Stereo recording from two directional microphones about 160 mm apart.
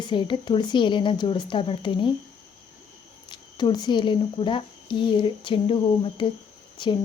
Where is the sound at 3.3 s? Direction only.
25° left (ahead or behind).